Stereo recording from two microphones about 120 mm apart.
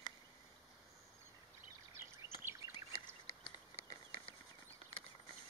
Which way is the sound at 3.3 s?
55° left (ahead or behind).